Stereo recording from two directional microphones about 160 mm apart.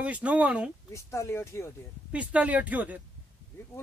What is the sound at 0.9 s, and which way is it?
Speech, 15° left (ahead or behind).